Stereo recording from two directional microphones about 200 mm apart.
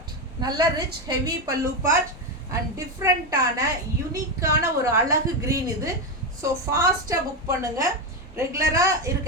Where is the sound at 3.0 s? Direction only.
15° right (ahead or behind).